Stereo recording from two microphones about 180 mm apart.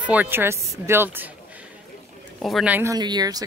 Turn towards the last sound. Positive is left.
turn(degrees=-20)  # may be behind; listen again after turning